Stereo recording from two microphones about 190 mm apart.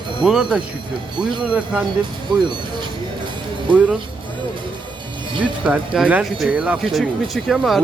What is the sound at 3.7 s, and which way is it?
Speech, 5° right (ahead or behind).